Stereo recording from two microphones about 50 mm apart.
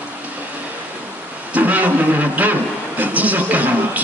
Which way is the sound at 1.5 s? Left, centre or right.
Right.